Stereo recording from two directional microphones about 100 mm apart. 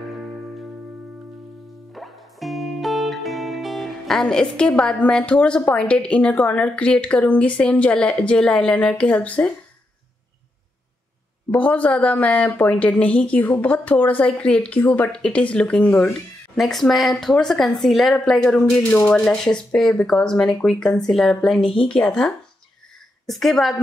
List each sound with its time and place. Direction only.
2.0 s music: centre (ahead or behind)
11.5 s speech: 15° left (ahead or behind)
16.1 s speech: 5° left (ahead or behind)